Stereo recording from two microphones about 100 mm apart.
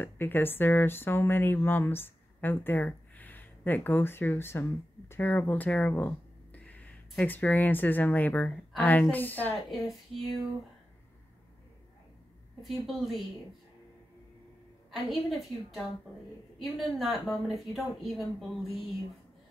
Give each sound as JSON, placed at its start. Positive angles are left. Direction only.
{"t": 0.0, "sound": "a woman's voice", "side_deg": 20}
{"t": 9.7, "sound": "speech", "side_deg": 0}
{"t": 12.6, "sound": "speech", "side_deg": 0}
{"t": 14.9, "sound": "speech", "side_deg": 0}